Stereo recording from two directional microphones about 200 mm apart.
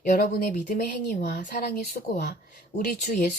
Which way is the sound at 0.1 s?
45° left (ahead or behind).